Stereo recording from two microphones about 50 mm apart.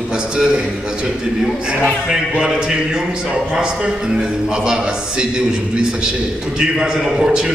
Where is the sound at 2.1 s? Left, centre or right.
Centre.